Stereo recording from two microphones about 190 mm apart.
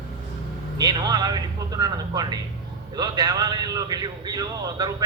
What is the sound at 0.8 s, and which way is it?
A man's voice, 20° right (ahead or behind).